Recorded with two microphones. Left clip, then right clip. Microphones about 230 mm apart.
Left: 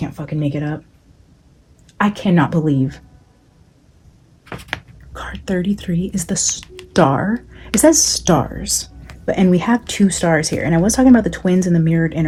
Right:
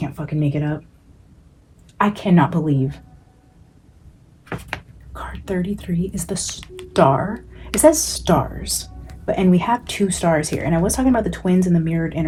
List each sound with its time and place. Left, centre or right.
0.0 s speech: left
2.0 s speech: left
5.1 s speech: left
6.5 s a sound: centre
6.9 s a woman's voice: left